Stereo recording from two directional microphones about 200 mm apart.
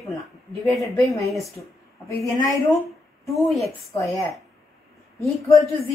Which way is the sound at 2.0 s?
15° left (ahead or behind).